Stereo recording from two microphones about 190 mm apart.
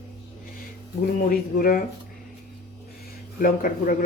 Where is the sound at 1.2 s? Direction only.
50° left (ahead or behind).